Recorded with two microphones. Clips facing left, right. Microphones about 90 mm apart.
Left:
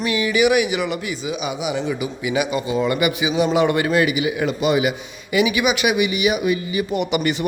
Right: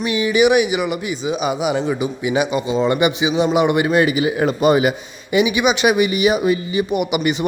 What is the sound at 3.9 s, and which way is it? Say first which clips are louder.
Speech: right 3 dB; 30° right (ahead or behind).